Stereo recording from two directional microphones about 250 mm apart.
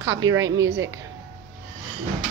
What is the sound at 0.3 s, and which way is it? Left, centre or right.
Speech, right.